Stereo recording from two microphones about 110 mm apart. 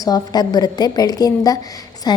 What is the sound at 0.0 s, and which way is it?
A woman's voice, 35° left (ahead or behind).